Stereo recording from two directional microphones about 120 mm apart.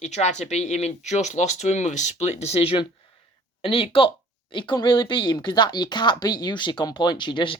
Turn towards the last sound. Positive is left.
turn(degrees=40)  # may be behind; listen again after turning